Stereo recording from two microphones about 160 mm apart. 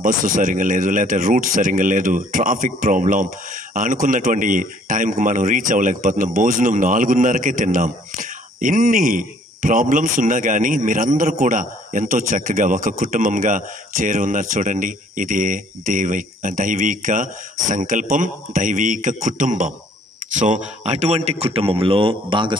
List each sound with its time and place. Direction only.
0.0 s a man's voice: 55° right (ahead or behind); by 22.6 s 30° right (ahead or behind)